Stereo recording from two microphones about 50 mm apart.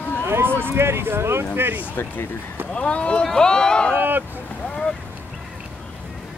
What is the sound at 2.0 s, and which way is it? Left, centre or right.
Speech, left.